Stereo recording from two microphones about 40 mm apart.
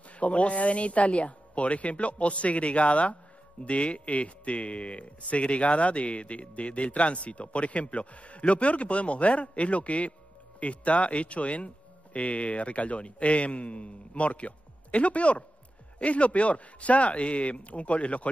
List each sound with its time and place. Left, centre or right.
0.2 s speech: left